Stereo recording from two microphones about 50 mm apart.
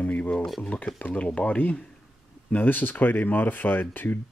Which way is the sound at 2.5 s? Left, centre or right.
Left.